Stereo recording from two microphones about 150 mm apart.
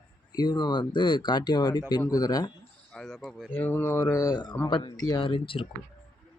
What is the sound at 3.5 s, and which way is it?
A man's voice, 15° left (ahead or behind).